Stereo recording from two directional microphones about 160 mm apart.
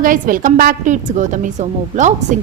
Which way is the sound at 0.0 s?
60° right (ahead or behind).